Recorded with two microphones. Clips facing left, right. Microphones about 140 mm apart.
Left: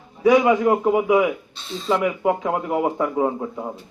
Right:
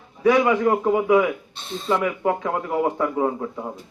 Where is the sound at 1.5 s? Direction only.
55° right (ahead or behind).